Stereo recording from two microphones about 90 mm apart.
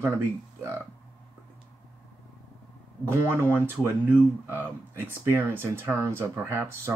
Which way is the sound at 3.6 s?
25° right (ahead or behind).